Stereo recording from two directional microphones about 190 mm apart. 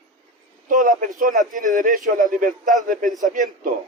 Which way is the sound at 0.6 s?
45° right (ahead or behind).